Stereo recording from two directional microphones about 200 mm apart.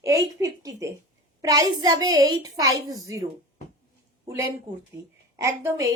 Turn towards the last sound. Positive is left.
turn(degrees=-15)  # may be behind; listen again after turning